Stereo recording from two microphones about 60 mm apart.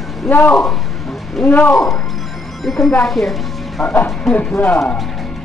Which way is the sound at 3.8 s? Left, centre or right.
Left.